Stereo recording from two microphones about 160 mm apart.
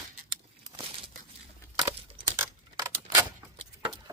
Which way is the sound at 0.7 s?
35° right (ahead or behind).